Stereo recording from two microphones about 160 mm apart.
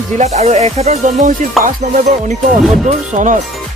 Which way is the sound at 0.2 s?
45° right (ahead or behind).